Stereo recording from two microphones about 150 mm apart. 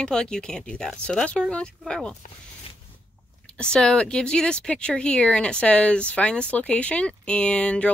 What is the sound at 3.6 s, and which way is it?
Speech, 5° left (ahead or behind).